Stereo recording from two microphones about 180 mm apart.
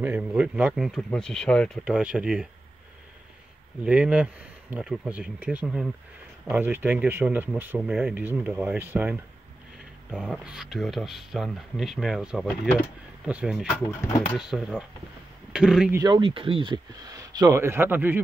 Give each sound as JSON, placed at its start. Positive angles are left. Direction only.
{"t": 0.0, "sound": "speech", "side_deg": -5}
{"t": 3.8, "sound": "speech", "side_deg": -5}
{"t": 10.1, "sound": "speech", "side_deg": 0}
{"t": 13.7, "sound": "speech", "side_deg": 10}
{"t": 14.3, "sound": "speech", "side_deg": -5}
{"t": 16.0, "sound": "speech", "side_deg": -25}